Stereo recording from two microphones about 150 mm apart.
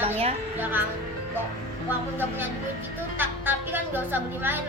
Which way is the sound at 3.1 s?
15° right (ahead or behind).